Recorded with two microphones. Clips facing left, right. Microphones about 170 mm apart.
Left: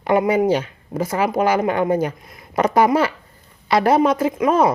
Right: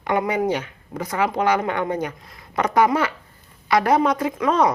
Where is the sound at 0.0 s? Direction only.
25° left (ahead or behind).